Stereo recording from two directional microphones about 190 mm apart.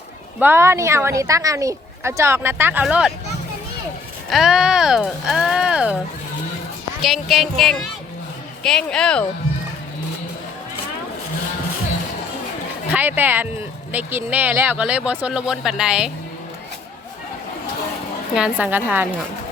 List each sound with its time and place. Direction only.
0.3 s a woman's voice: 10° right (ahead or behind)
4.3 s speech: centre (ahead or behind)
7.0 s speech: centre (ahead or behind)
12.9 s a woman's voice: 10° right (ahead or behind)
18.3 s a woman's voice: 5° right (ahead or behind)